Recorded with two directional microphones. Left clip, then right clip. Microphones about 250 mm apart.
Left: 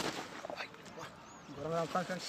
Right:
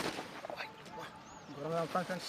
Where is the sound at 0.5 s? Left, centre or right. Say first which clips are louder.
Right 1 dB; centre.